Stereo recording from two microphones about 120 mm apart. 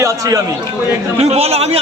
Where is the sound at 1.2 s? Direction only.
60° right (ahead or behind).